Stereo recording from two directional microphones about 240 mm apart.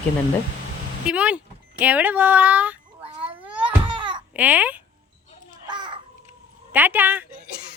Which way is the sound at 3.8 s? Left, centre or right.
Centre.